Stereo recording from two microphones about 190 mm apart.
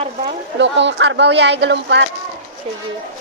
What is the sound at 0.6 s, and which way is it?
Speech, 70° right (ahead or behind).